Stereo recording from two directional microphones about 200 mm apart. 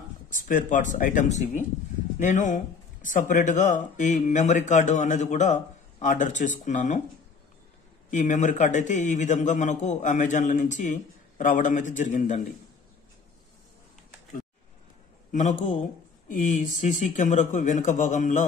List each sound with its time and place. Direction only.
0.3 s speech: 40° left (ahead or behind)
8.1 s speech: 40° left (ahead or behind)
15.3 s speech: 40° left (ahead or behind)